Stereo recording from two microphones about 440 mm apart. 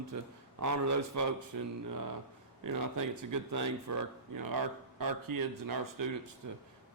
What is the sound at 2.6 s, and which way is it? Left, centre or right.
A man's voice, right.